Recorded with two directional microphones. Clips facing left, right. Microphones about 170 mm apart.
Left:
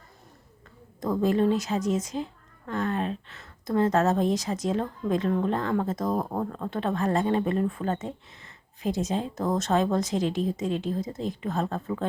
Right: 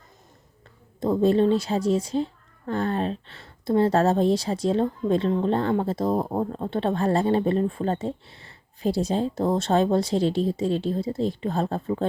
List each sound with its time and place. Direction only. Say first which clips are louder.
0.9 s a woman's voice: right 4 dB; 25° right (ahead or behind)